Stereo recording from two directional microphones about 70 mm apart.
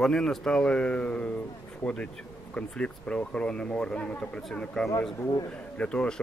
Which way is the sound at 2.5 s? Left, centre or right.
Centre.